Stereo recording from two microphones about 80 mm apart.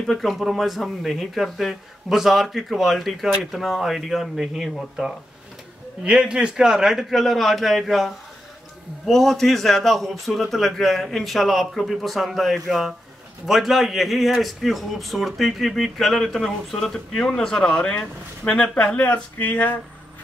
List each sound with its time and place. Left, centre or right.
0.0 s a man's voice: centre
18.9 s speech: left